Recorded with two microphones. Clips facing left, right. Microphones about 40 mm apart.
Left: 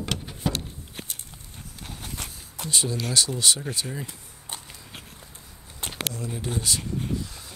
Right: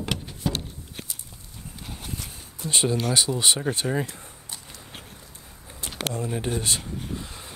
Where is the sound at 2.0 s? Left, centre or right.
Left.